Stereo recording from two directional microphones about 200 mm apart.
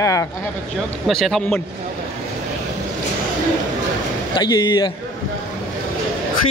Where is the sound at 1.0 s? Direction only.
Centre (ahead or behind).